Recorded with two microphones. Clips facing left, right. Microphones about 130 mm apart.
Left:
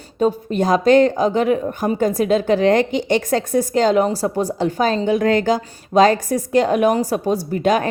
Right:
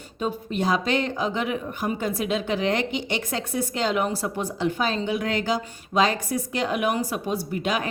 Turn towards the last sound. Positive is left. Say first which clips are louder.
# left 9 dB
turn(degrees=45)  # may be behind; listen again after turning